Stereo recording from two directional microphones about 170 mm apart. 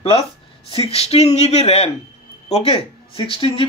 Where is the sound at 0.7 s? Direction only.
35° left (ahead or behind).